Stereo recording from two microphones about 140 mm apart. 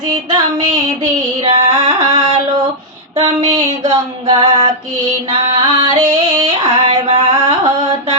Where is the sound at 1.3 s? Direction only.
35° right (ahead or behind).